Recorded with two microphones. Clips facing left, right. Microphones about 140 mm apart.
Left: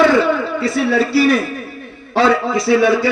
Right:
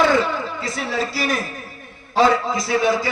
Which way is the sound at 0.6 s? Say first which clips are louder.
Left 10 dB; 65° left (ahead or behind).